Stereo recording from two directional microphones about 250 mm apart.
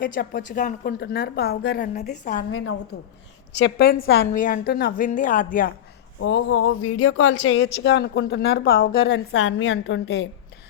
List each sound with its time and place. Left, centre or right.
0.0 s a woman's voice: left
2.5 s speech: left
3.6 s a woman's voice: left
6.1 s speech: left